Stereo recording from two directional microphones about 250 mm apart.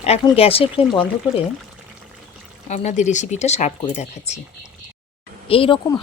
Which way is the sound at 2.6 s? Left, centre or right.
Left.